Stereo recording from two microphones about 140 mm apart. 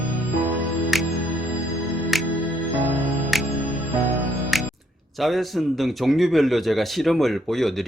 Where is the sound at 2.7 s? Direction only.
10° right (ahead or behind).